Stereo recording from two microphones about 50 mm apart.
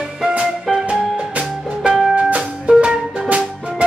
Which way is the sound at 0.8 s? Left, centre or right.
Right.